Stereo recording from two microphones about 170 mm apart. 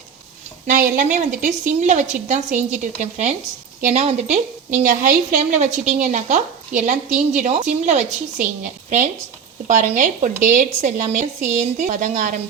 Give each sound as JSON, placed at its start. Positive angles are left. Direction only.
{"t": 0.7, "sound": "a woman's voice", "side_deg": -50}
{"t": 4.8, "sound": "a woman's voice", "side_deg": -55}
{"t": 5.4, "sound": "a woman's voice", "side_deg": -45}
{"t": 9.6, "sound": "a woman's voice", "side_deg": -50}